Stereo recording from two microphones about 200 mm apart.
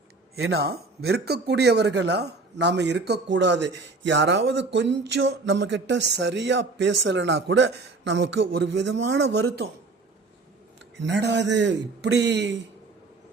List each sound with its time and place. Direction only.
0.3 s speech: 70° right (ahead or behind)
0.7 s speech: 55° right (ahead or behind)
10.9 s speech: 60° right (ahead or behind)